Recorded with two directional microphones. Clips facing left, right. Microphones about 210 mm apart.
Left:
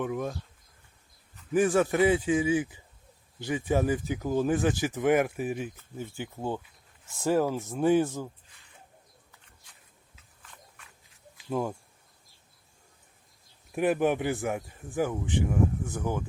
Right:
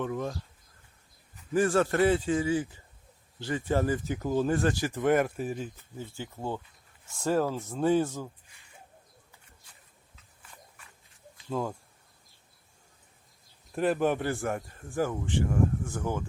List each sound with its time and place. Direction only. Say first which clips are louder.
0.0 s speech: left 1 dB; 10° left (ahead or behind)
1.5 s speech: left 1 dB; 15° left (ahead or behind)
11.3 s a sound: left 2 dB; 15° left (ahead or behind)
13.7 s speech: left 1 dB; 15° left (ahead or behind)